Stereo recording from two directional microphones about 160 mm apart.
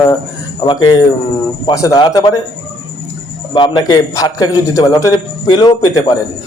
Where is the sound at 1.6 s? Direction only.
20° left (ahead or behind).